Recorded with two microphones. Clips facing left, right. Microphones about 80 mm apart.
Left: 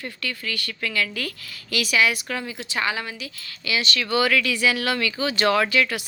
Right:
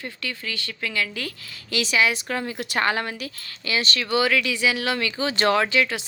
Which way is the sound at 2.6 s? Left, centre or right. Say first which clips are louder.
Right 4 dB; right.